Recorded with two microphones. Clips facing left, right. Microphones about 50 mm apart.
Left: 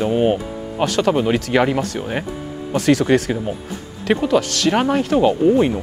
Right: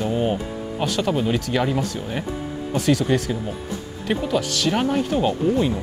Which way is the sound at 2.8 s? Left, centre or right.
Left.